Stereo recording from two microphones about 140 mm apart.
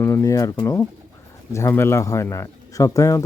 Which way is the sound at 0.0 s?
20° left (ahead or behind).